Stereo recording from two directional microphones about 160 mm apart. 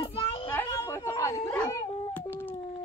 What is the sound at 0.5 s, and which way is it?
A child's voice, 15° left (ahead or behind).